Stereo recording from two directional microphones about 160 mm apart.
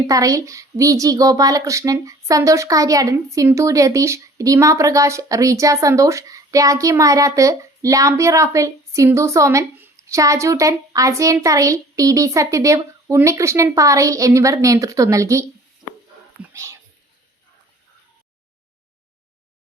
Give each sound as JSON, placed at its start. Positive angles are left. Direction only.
{"t": 0.1, "sound": "speech", "side_deg": -20}
{"t": 16.5, "sound": "speech", "side_deg": -20}